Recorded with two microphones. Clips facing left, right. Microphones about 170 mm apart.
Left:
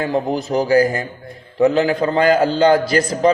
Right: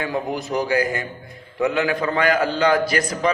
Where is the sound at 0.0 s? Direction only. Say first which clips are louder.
Left 5 dB; 35° left (ahead or behind).